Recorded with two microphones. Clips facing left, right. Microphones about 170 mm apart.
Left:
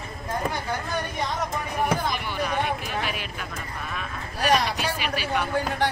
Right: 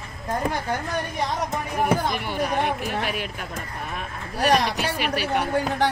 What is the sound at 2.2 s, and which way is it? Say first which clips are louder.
A man's voice: right 3 dB; 50° right (ahead or behind).